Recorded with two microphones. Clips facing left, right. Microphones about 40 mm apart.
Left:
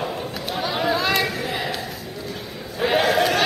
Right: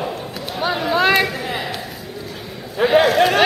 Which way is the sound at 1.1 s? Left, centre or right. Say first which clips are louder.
Right 4 dB; centre.